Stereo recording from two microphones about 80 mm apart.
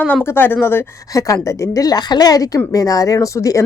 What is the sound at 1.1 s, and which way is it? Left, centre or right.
Speech, left.